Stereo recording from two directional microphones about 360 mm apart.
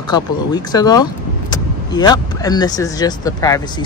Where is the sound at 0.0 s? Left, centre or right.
Centre.